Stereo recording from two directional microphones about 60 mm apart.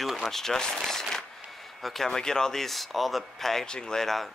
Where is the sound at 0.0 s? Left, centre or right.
Centre.